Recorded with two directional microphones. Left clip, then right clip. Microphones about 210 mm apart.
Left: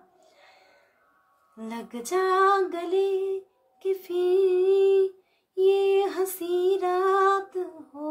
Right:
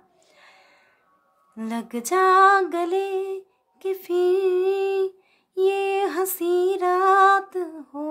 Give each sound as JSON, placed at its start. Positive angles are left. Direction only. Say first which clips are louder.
{"t": 1.6, "sound": "female singing", "louder": "right 6 dB", "side_deg": -45}